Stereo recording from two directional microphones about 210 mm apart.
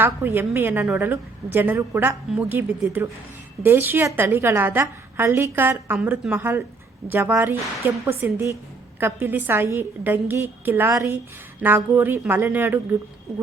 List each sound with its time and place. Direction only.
0.0 s a woman's voice: 10° right (ahead or behind)